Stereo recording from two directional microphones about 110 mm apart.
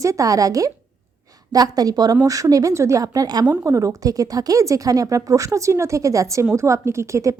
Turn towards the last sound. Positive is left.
turn(degrees=-30)  # may be behind; listen again after turning